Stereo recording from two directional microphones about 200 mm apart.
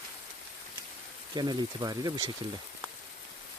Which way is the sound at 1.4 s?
20° right (ahead or behind).